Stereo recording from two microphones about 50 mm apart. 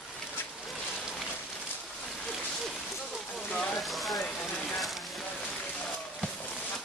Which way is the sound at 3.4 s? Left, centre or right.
Left.